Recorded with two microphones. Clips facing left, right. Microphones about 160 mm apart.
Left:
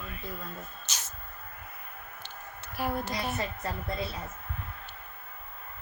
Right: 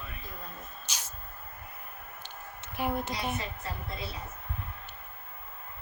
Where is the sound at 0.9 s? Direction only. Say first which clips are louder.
Even; 10° right (ahead or behind).